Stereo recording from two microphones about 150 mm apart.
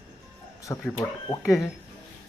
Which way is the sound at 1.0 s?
20° left (ahead or behind).